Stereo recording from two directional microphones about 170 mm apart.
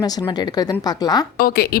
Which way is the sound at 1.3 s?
65° left (ahead or behind).